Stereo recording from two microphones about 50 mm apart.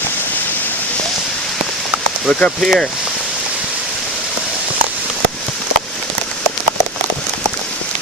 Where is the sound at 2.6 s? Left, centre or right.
Centre.